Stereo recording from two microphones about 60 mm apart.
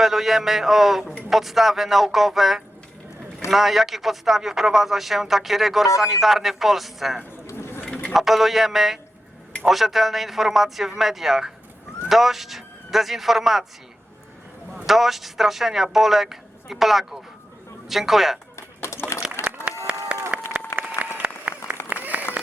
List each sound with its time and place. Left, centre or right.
0.0 s speech: centre
7.5 s a sound: left
8.1 s speech: centre
14.8 s speech: centre
18.5 s typing: left
19.9 s a sound: right
20.3 s applause: right
20.7 s applause: left
21.5 s applause: centre
22.0 s applause: right